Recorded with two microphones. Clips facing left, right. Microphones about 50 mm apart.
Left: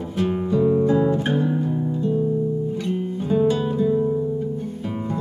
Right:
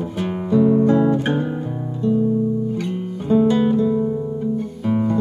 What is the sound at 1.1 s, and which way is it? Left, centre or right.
Guitar, right.